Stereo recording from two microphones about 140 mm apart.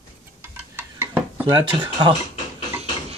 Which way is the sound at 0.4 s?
15° right (ahead or behind).